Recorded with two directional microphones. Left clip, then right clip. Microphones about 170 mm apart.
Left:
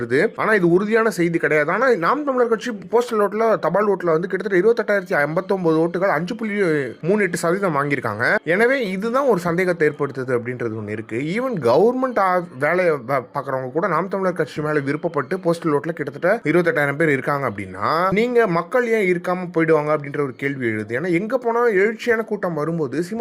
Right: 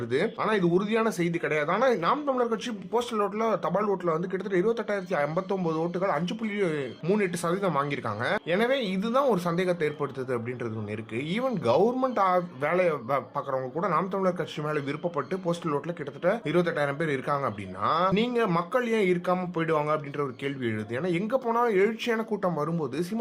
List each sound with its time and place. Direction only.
0.1 s speech: 35° left (ahead or behind)
18.3 s speech: 25° left (ahead or behind)